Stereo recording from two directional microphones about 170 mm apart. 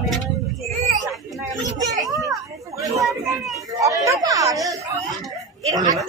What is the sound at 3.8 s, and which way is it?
Speech, 20° right (ahead or behind).